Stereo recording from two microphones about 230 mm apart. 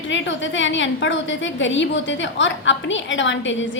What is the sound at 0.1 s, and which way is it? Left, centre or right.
A woman's voice, left.